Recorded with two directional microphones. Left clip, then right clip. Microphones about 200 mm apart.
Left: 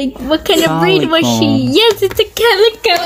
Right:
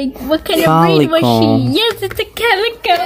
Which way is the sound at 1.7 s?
20° left (ahead or behind).